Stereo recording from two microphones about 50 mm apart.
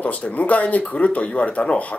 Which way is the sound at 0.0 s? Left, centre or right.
Left.